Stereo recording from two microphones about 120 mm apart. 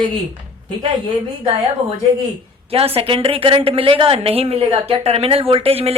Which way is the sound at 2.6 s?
55° right (ahead or behind).